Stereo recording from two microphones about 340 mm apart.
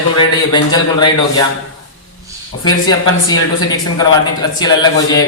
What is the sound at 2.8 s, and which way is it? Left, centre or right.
A man's voice, centre.